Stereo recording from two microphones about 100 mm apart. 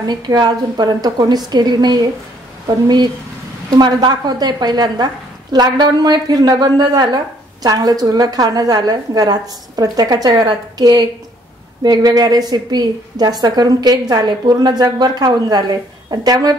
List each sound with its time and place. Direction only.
0.0 s a woman's voice: 45° right (ahead or behind)
3.7 s a woman's voice: 45° right (ahead or behind)